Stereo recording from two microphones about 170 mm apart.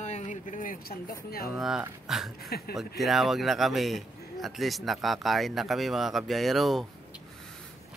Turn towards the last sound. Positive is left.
turn(degrees=0)  # may be behind; listen again after turning